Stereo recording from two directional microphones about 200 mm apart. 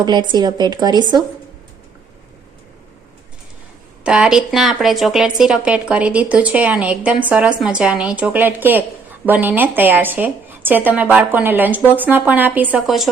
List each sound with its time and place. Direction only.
0.0 s speech: 20° right (ahead or behind)
4.0 s a woman's voice: 5° right (ahead or behind)